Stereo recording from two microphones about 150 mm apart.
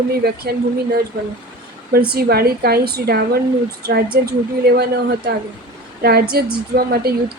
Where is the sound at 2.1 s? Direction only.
90° right.